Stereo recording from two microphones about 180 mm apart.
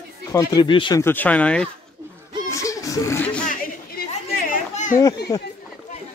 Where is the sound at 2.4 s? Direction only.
15° left (ahead or behind).